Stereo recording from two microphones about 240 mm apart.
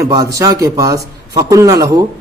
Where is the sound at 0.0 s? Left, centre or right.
Centre.